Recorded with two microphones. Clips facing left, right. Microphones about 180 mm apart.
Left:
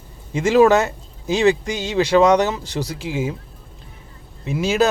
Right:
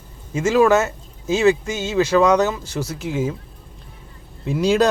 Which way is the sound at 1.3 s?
35° left (ahead or behind).